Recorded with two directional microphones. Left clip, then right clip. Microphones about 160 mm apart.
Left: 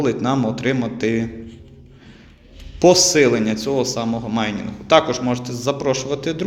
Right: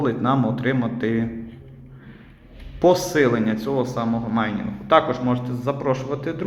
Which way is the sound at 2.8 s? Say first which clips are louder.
Left 4 dB; 40° left (ahead or behind).